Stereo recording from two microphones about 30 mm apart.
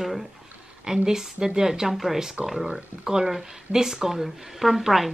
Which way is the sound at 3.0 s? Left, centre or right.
Centre.